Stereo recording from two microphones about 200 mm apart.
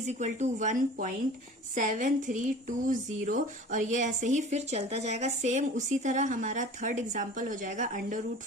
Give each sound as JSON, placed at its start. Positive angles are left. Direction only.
{"t": 0.1, "sound": "a woman's voice", "side_deg": -35}